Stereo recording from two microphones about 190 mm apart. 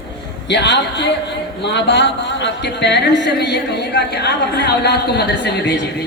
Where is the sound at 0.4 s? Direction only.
65° left (ahead or behind).